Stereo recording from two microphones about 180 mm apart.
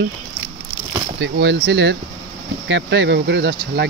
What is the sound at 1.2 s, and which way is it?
Speech, 75° right (ahead or behind).